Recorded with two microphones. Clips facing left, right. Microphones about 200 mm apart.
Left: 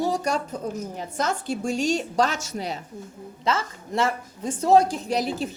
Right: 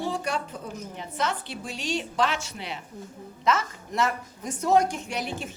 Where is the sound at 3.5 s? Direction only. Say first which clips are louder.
Even; 30° left (ahead or behind).